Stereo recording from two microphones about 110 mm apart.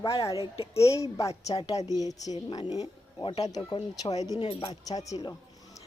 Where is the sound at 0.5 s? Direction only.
60° left (ahead or behind).